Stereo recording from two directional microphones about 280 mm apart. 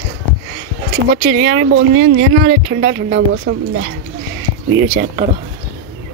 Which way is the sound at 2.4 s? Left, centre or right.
Right.